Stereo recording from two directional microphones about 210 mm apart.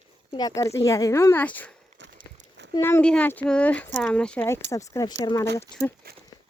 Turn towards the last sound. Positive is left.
turn(degrees=-45)  # may be behind; listen again after turning